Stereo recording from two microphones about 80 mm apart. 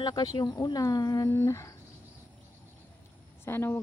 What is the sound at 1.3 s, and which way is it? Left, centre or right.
Speech, left.